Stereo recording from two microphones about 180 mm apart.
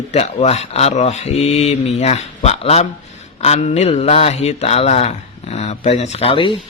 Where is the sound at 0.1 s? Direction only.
40° left (ahead or behind).